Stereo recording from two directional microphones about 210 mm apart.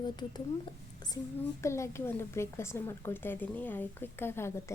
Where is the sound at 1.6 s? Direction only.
15° left (ahead or behind).